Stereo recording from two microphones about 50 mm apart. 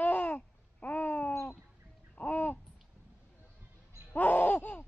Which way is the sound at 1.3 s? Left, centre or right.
Left.